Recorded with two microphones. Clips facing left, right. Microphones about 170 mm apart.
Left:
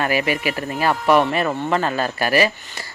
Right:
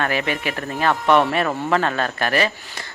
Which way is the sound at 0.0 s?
5° left (ahead or behind).